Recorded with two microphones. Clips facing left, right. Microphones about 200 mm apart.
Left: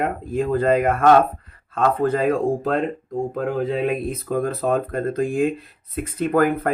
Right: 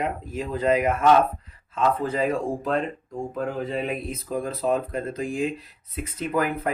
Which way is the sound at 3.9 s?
60° left (ahead or behind).